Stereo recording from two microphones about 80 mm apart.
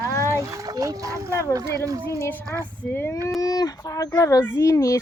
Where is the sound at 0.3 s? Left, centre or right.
Right.